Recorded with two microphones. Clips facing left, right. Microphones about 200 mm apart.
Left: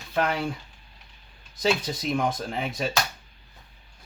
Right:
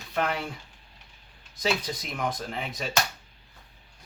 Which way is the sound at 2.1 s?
25° left (ahead or behind).